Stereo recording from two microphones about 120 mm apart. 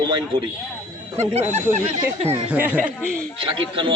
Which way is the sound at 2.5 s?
15° right (ahead or behind).